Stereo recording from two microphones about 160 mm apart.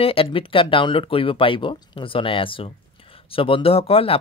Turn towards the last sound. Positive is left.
turn(degrees=35)  # may be behind; listen again after turning